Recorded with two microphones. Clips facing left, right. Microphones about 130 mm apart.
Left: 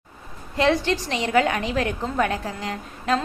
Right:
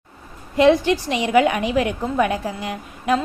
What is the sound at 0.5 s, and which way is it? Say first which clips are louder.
A woman's voice: right 6 dB; 15° right (ahead or behind).